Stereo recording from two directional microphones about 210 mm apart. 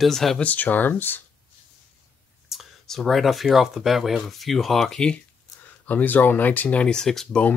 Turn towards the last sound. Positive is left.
turn(degrees=5)  # may be behind; listen again after turning